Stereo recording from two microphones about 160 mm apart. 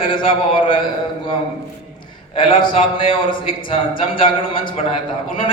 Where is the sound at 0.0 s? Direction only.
35° left (ahead or behind).